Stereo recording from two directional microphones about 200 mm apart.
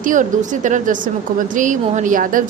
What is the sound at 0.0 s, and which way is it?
Speech, 40° right (ahead or behind).